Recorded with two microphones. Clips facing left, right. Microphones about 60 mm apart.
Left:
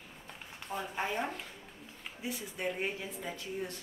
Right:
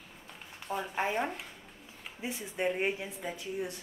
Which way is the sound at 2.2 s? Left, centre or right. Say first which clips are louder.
Right 4 dB; right.